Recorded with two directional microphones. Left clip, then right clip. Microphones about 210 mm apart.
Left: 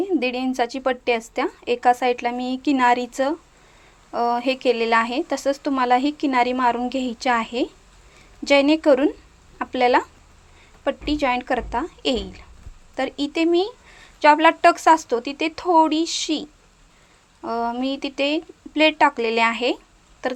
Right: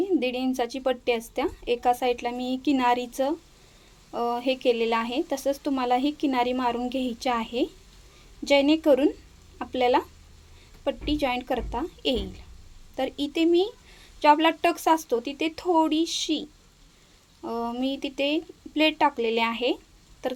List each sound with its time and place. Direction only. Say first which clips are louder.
0.0 s speech: left 3 dB; 5° left (ahead or behind)